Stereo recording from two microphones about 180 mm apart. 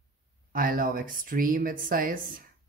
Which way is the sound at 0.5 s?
50° right (ahead or behind).